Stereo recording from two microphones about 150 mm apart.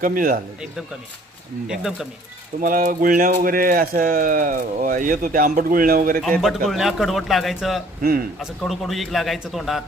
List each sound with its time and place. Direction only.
0.0 s speech: 65° right (ahead or behind)
1.6 s a man's voice: 5° right (ahead or behind)
2.6 s speech: 65° right (ahead or behind)
6.7 s a man's voice: centre (ahead or behind)